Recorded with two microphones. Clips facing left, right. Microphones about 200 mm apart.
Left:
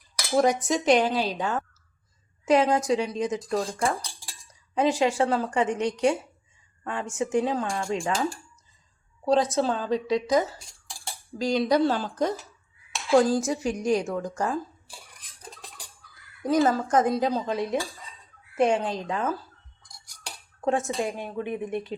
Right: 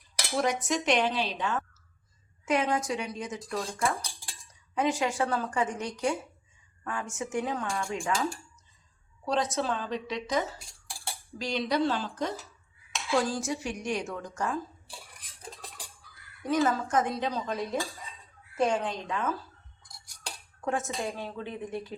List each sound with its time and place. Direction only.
0.3 s a woman's voice: 35° left (ahead or behind)
4.7 s speech: 30° left (ahead or behind)
9.2 s a woman's voice: 30° left (ahead or behind)
10.7 s dishes: centre (ahead or behind)
11.3 s a woman's voice: 45° left (ahead or behind)
14.8 s dishes: centre (ahead or behind)
16.4 s a woman's voice: 40° left (ahead or behind)
19.8 s cutlery: 5° right (ahead or behind)
20.7 s speech: 25° left (ahead or behind)
21.0 s speech: 15° left (ahead or behind)